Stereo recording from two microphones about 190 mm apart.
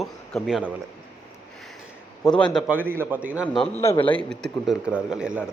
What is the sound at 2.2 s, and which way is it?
Speech, 5° left (ahead or behind).